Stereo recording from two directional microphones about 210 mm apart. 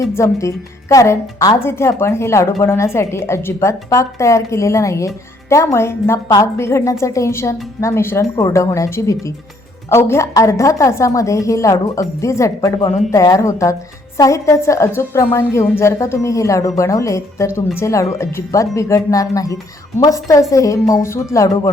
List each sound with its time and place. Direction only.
0.1 s a woman's voice: 15° left (ahead or behind)